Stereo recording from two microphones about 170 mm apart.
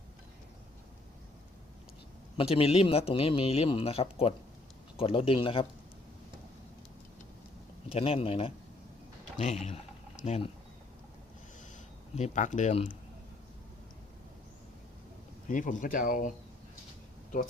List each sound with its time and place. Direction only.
2.4 s speech: 35° left (ahead or behind)
7.9 s speech: 35° left (ahead or behind)
9.6 s a sound: 45° left (ahead or behind)
12.1 s speech: 45° left (ahead or behind)
15.4 s speech: 50° left (ahead or behind)